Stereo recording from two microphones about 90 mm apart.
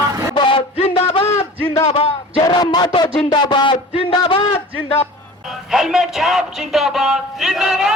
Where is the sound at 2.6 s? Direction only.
55° left (ahead or behind); by 4.4 s 80° left.